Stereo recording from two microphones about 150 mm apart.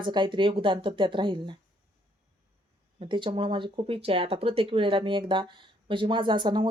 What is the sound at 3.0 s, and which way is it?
Speech, 30° right (ahead or behind).